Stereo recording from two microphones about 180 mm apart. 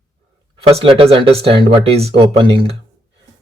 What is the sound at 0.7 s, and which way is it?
Speech, 35° right (ahead or behind).